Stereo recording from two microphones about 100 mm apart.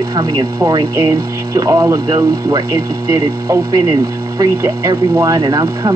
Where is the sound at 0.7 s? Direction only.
35° right (ahead or behind).